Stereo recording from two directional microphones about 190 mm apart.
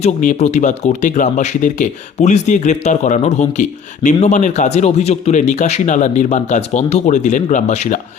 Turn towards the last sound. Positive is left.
turn(degrees=40)  # may be behind; listen again after turning